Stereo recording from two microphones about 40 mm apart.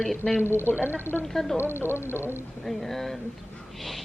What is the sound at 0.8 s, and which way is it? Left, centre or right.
Speech, right.